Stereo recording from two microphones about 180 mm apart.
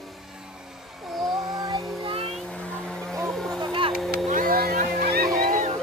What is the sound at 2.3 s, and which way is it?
Vehicle, 5° left (ahead or behind).